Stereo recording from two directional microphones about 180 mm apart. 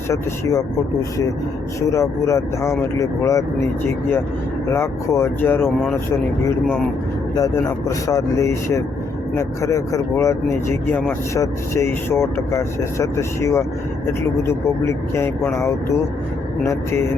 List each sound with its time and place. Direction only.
1.9 s speech: 15° left (ahead or behind)
7.3 s speech: 20° left (ahead or behind)